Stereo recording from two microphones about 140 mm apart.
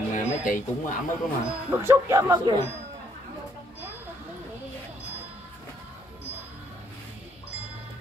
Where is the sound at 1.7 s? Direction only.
20° right (ahead or behind).